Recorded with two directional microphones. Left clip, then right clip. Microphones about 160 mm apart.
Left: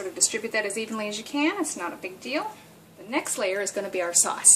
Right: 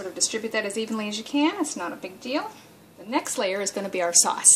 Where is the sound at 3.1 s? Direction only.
35° right (ahead or behind).